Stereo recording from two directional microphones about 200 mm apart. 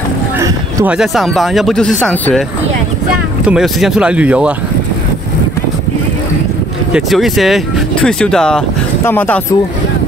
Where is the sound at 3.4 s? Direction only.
Centre (ahead or behind).